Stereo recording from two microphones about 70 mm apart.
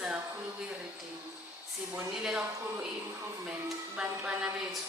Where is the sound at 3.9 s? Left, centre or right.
Centre.